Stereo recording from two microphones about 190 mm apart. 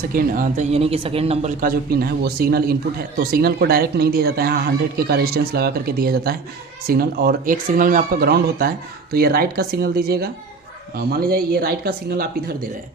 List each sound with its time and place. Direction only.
0.1 s speech: 45° right (ahead or behind)